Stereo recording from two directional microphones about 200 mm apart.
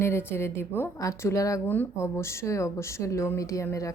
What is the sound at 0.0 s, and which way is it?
A woman's voice, 10° left (ahead or behind).